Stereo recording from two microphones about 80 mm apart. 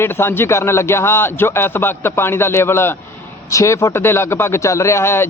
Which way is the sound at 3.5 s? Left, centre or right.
Left.